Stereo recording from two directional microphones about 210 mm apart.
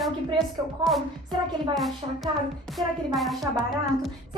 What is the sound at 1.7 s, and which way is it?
Speech, centre (ahead or behind).